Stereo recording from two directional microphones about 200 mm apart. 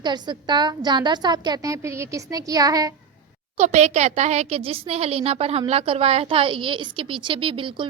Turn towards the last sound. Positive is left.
turn(degrees=-25)  # may be behind; listen again after turning